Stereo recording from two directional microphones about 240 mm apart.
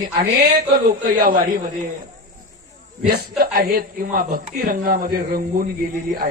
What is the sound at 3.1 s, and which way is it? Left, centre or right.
A man's voice, right.